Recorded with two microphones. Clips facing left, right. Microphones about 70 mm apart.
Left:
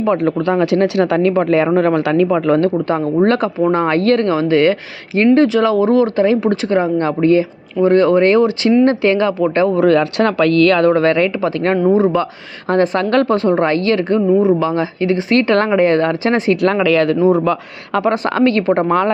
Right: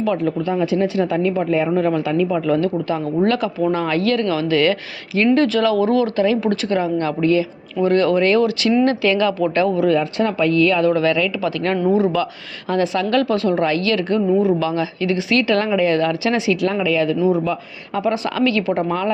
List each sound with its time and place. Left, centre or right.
0.2 s speech: left
9.7 s a woman's voice: left
14.2 s speech: left
14.6 s a woman's voice: left
16.6 s speech: left